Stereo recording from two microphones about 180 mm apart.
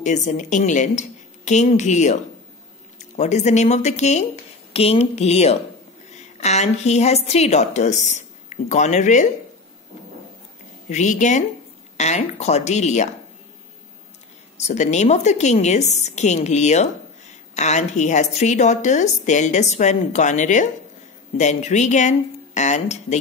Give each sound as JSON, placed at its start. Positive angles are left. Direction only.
{"t": 0.0, "sound": "a woman's voice", "side_deg": 40}
{"t": 10.9, "sound": "a woman's voice", "side_deg": 40}
{"t": 14.7, "sound": "a woman's voice", "side_deg": 40}